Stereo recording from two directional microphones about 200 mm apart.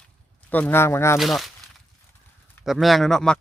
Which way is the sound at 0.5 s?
10° left (ahead or behind).